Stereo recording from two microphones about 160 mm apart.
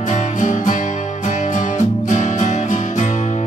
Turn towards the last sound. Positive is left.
turn(degrees=50)  # may be behind; listen again after turning